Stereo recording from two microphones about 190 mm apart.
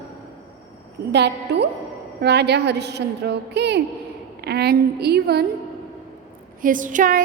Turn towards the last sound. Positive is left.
turn(degrees=-45)  # may be behind; listen again after turning